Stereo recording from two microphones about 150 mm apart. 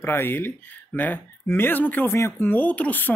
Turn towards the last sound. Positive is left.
turn(degrees=10)  # may be behind; listen again after turning